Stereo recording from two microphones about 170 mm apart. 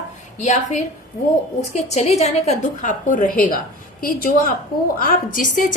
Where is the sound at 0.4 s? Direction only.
45° left (ahead or behind).